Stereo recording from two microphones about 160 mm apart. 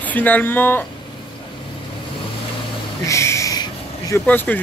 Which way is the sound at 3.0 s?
20° left (ahead or behind).